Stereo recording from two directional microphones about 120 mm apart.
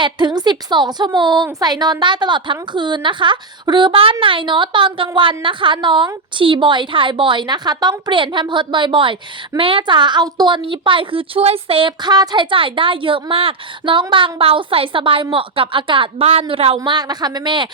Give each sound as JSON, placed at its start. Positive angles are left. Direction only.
{"t": 0.0, "sound": "a woman's voice", "side_deg": -40}
{"t": 16.8, "sound": "a woman's voice", "side_deg": -35}